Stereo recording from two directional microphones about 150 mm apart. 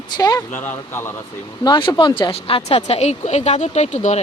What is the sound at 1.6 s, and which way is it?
Speech, 30° left (ahead or behind).